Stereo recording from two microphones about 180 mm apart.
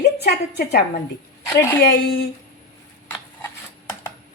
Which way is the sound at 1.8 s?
70° left (ahead or behind).